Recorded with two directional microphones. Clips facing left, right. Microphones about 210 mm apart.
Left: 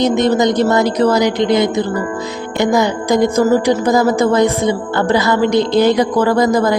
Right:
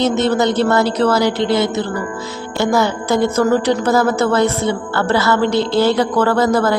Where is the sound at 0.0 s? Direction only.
15° left (ahead or behind).